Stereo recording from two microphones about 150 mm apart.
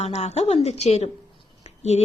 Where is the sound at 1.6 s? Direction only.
45° left (ahead or behind).